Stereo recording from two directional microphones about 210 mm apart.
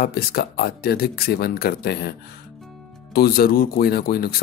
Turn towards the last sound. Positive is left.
turn(degrees=45)  # may be behind; listen again after turning